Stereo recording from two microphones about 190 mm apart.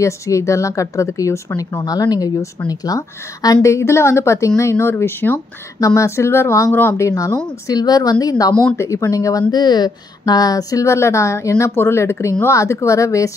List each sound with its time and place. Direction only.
0.0 s a woman's voice: 15° left (ahead or behind)